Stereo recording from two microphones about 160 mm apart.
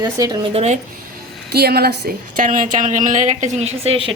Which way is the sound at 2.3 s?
55° right (ahead or behind).